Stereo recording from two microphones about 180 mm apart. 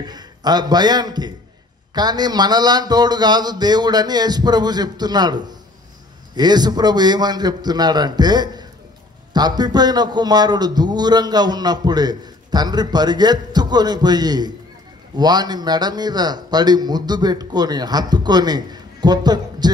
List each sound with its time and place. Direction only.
0.1 s a man's voice: 20° right (ahead or behind)